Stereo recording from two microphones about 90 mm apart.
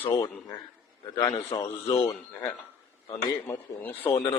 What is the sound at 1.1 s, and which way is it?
Speech, 65° left (ahead or behind).